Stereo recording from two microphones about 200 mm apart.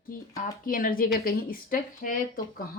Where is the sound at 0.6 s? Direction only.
45° left (ahead or behind).